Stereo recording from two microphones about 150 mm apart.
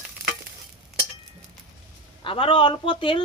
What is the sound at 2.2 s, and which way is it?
Speech, 35° left (ahead or behind).